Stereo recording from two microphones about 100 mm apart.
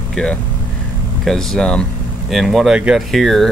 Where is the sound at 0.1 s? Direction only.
10° left (ahead or behind).